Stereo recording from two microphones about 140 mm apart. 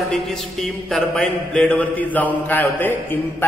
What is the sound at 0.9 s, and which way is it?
A man's voice, 5° left (ahead or behind).